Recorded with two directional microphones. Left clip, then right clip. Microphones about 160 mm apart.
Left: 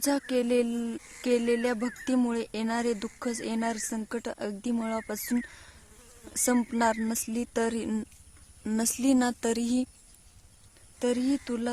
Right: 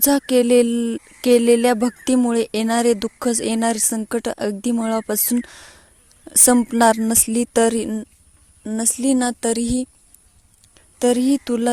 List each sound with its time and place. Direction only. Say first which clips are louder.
0.0 s speech: right 11 dB; 40° right (ahead or behind)
8.7 s speech: right 6 dB; 30° right (ahead or behind)
11.0 s speech: right 11 dB; 45° right (ahead or behind)